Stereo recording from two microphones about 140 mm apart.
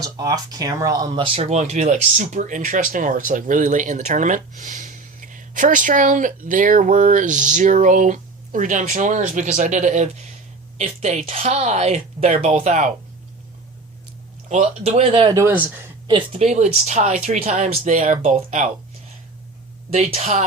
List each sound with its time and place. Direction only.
0.0 s speech: 25° right (ahead or behind)
1.5 s a woman's voice: 55° right (ahead or behind)
14.5 s a woman's voice: 50° right (ahead or behind); by 15.4 s 35° right (ahead or behind)
15.4 s speech: 15° right (ahead or behind)
16.0 s speech: 40° right (ahead or behind); by 18.7 s 60° right (ahead or behind)
20.0 s a woman's voice: 50° right (ahead or behind)